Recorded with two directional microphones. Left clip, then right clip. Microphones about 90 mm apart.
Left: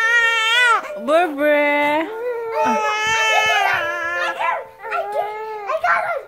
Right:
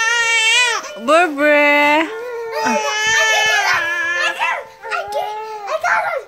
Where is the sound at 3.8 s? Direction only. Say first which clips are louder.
Right 4 dB; 45° left (ahead or behind).